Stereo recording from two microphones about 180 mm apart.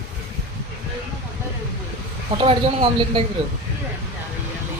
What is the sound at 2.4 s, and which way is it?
Speech, 30° right (ahead or behind).